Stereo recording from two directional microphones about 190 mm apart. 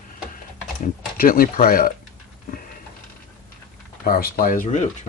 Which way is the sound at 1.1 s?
50° left (ahead or behind).